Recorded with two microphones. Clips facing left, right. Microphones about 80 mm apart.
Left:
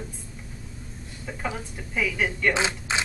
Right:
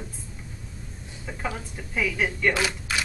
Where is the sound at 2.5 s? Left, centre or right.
Left.